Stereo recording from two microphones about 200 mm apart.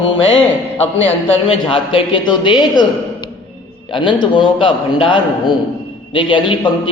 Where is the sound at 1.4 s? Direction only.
25° left (ahead or behind).